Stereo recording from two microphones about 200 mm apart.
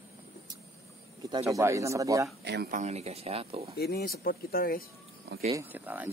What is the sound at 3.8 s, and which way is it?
Speech, 55° left (ahead or behind).